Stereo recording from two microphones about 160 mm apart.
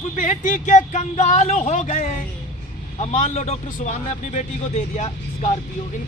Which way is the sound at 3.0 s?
45° left (ahead or behind).